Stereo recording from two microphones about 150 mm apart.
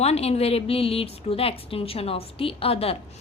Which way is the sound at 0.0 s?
45° left (ahead or behind).